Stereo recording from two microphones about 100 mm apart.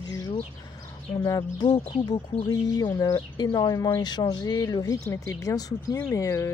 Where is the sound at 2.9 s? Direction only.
30° left (ahead or behind).